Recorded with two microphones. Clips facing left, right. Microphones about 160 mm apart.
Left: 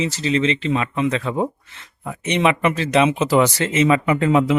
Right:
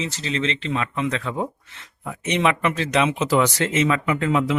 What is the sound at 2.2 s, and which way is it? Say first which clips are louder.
Speech: left 3 dB; centre (ahead or behind).